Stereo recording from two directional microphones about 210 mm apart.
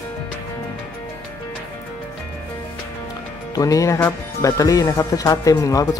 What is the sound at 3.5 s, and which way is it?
Speech, 15° left (ahead or behind).